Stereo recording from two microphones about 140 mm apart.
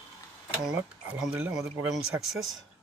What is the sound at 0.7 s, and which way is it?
Speech, 5° right (ahead or behind).